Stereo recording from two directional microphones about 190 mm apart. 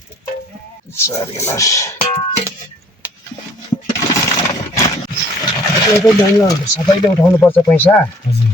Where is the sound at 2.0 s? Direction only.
30° left (ahead or behind).